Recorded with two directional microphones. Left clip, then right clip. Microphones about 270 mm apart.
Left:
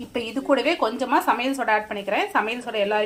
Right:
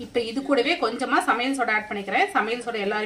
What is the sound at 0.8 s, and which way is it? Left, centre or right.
Speech, centre.